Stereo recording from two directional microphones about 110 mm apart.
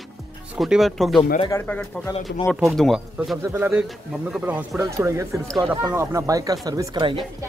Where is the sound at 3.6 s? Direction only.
20° right (ahead or behind).